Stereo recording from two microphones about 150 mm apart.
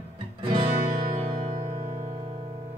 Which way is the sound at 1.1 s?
45° right (ahead or behind).